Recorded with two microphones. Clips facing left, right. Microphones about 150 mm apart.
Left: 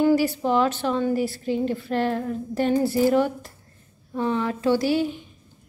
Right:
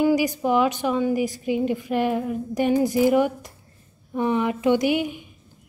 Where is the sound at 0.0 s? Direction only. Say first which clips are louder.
Even; 15° right (ahead or behind).